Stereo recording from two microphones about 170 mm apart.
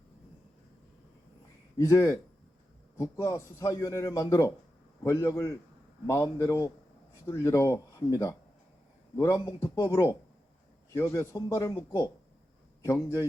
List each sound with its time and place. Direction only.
1.8 s a man's voice: 20° left (ahead or behind)